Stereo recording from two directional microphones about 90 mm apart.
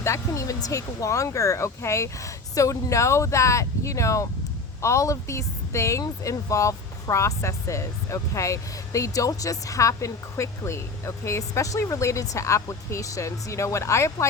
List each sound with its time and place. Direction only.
0.0 s speech: 35° left (ahead or behind)